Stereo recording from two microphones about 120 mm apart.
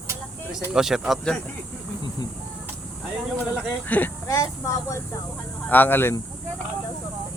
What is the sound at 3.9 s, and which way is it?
Speech, 15° left (ahead or behind).